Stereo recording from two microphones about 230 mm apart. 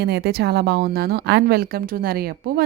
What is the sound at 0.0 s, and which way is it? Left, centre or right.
Speech, right.